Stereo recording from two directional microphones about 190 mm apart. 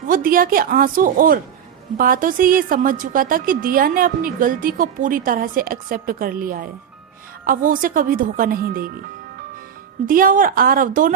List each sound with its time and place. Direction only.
0.1 s a woman's voice: 50° right (ahead or behind)
10.1 s a woman's voice: 45° right (ahead or behind)